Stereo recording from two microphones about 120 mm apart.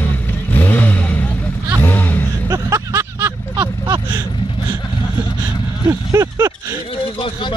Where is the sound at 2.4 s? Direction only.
30° right (ahead or behind).